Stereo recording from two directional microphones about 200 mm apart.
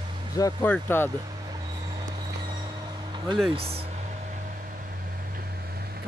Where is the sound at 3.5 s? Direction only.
30° right (ahead or behind).